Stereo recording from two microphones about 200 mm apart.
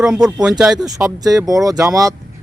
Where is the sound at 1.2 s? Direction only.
15° right (ahead or behind).